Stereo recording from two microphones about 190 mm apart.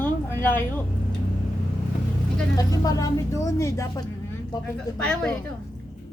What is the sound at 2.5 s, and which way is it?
Speech, 20° left (ahead or behind).